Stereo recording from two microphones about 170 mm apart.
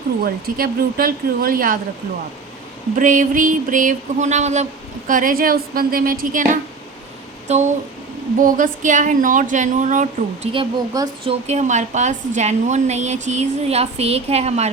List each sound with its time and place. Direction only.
0.2 s speech: 60° right (ahead or behind)
2.9 s speech: 50° right (ahead or behind)
7.4 s speech: 40° right (ahead or behind)
8.4 s speech: 50° right (ahead or behind)
10.5 s speech: 25° right (ahead or behind)